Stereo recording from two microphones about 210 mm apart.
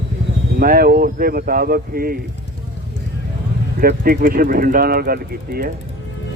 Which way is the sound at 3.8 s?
45° right (ahead or behind).